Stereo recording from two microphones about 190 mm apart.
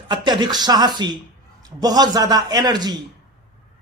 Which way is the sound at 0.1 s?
20° right (ahead or behind).